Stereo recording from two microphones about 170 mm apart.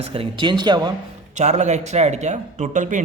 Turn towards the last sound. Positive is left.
turn(degrees=-45)  # may be behind; listen again after turning